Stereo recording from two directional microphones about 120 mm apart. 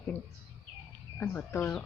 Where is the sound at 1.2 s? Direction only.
15° left (ahead or behind).